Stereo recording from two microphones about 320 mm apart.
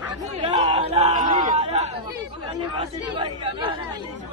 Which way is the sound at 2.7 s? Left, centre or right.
Centre.